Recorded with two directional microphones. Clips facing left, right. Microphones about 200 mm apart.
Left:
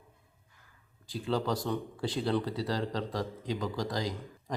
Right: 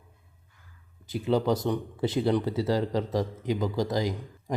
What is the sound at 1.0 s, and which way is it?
A man's voice, 20° right (ahead or behind).